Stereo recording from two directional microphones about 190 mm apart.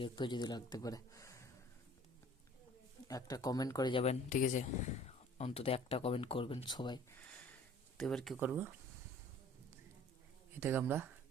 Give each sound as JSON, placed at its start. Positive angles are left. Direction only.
{"t": 0.0, "sound": "speech", "side_deg": 25}
{"t": 3.1, "sound": "speech", "side_deg": 20}
{"t": 5.0, "sound": "speech", "side_deg": 30}
{"t": 7.9, "sound": "speech", "side_deg": 0}
{"t": 8.4, "sound": "speech", "side_deg": -10}
{"t": 10.6, "sound": "speech", "side_deg": -10}